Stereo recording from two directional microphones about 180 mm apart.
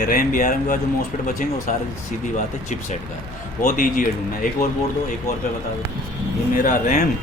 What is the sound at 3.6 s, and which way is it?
Speech, 50° left (ahead or behind).